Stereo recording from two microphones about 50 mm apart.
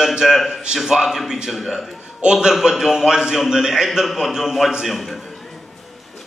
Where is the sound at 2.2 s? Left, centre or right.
Centre.